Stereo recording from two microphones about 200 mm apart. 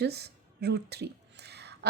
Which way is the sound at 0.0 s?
55° right (ahead or behind).